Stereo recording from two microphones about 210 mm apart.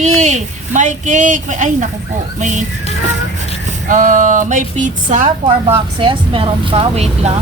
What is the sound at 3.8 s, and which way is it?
Speech, 40° right (ahead or behind).